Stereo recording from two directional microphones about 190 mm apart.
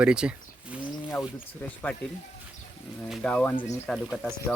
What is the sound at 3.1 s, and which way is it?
Speech, 5° left (ahead or behind).